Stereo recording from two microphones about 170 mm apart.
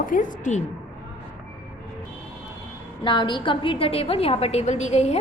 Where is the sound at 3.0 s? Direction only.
25° left (ahead or behind).